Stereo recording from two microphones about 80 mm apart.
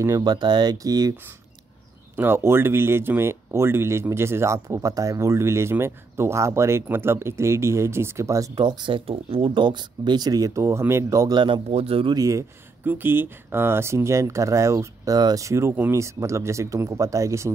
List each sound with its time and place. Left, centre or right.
0.2 s speech: right
2.1 s speech: right
8.5 s speech: right
11.3 s a man's voice: right
12.2 s speech: right
12.8 s speech: right
15.1 s speech: right
15.4 s speech: right